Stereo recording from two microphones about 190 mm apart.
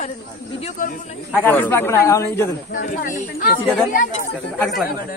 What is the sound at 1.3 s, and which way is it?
Speech, 10° left (ahead or behind).